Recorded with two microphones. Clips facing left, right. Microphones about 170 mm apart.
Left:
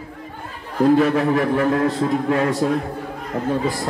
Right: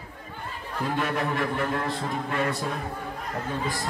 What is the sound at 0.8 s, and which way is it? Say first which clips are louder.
A man's voice: left 12 dB; 85° left.